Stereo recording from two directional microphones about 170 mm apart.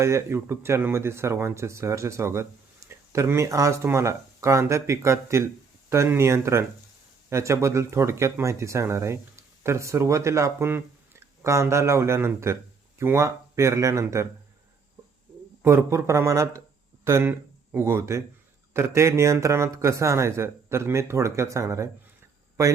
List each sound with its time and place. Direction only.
0.0 s speech: 15° right (ahead or behind)
15.6 s speech: 15° right (ahead or behind)